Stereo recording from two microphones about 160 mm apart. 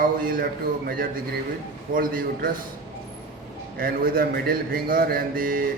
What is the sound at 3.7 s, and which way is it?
Speech, 65° right (ahead or behind).